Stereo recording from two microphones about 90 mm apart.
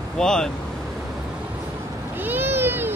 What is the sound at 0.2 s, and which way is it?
Speech, 5° left (ahead or behind).